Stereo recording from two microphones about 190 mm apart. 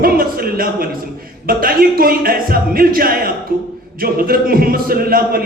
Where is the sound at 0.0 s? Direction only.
50° right (ahead or behind).